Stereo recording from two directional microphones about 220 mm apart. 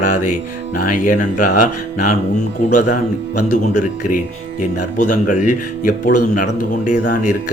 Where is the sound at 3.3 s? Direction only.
90° left.